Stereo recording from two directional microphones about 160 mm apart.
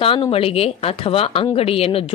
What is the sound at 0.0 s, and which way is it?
Speech, 35° left (ahead or behind).